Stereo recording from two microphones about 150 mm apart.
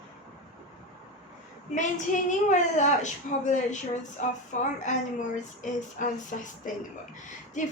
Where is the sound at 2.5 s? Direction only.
55° left (ahead or behind).